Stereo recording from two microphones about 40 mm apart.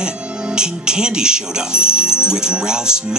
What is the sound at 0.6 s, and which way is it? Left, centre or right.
Speech, right.